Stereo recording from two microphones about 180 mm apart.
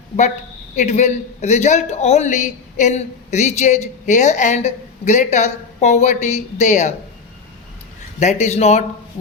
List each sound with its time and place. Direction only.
0.8 s a man's voice: 40° left (ahead or behind)
8.2 s a man's voice: 40° left (ahead or behind)